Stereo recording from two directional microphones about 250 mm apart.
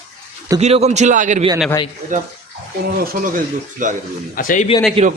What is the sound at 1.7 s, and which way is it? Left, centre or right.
Speech, centre.